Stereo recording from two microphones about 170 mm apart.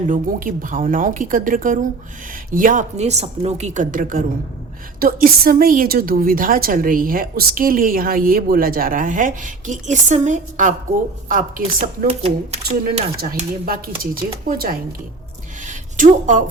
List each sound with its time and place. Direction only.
0.1 s a woman's voice: 50° right (ahead or behind)
12.0 s speech: 40° right (ahead or behind)
13.7 s a woman's voice: 55° right (ahead or behind)
15.6 s a sound: 45° right (ahead or behind)